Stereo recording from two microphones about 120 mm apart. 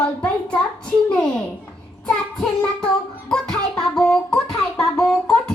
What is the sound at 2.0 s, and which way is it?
Child singing, 5° left (ahead or behind).